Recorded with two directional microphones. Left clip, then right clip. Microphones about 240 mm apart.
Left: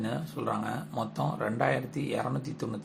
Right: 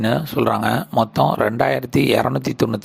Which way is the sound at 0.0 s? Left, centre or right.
Right.